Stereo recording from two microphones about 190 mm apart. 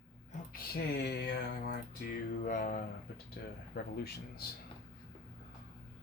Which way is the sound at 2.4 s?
45° left (ahead or behind).